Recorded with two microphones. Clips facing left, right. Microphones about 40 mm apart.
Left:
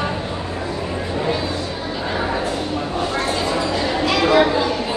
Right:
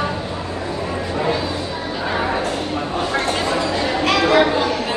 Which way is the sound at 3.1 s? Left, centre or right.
Right.